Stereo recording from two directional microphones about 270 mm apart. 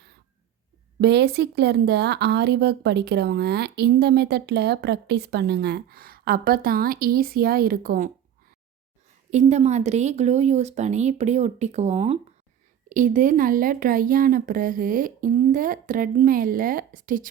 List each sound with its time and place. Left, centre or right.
1.0 s a woman's voice: right
9.3 s a woman's voice: right